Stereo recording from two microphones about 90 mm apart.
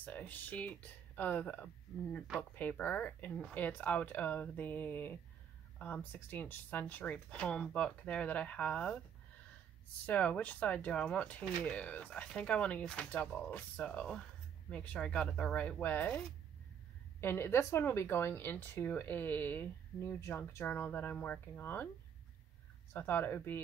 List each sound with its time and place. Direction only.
0.0 s speech: 15° left (ahead or behind)
2.8 s speech: 20° left (ahead or behind)
10.0 s speech: 15° left (ahead or behind)
17.2 s speech: 25° left (ahead or behind)
22.9 s speech: 25° left (ahead or behind)